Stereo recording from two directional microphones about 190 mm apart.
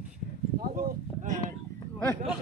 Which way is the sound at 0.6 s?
50° right (ahead or behind).